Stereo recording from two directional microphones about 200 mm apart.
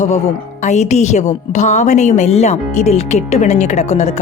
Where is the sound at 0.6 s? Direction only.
35° left (ahead or behind).